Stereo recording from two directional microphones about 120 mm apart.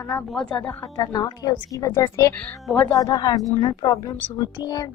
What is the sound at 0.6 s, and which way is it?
A woman's voice, 30° left (ahead or behind).